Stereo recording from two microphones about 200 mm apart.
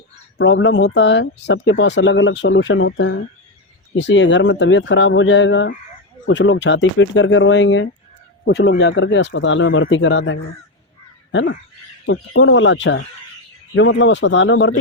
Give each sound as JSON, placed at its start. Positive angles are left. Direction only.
{"t": 0.3, "sound": "speech", "side_deg": 70}
{"t": 11.3, "sound": "a sound", "side_deg": 70}
{"t": 12.0, "sound": "speech", "side_deg": 75}